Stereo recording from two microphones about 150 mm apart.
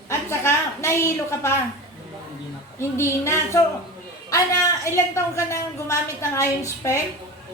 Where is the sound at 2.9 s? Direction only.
15° left (ahead or behind).